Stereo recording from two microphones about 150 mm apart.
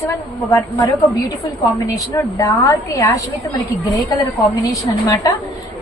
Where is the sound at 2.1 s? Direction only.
20° left (ahead or behind).